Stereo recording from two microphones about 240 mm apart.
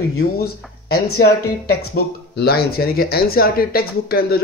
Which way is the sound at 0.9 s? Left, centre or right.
Left.